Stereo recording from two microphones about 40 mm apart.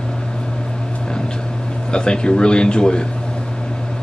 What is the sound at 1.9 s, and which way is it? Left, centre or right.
Speech, left.